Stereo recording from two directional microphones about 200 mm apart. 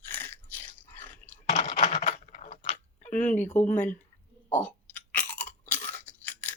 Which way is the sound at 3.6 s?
40° left (ahead or behind).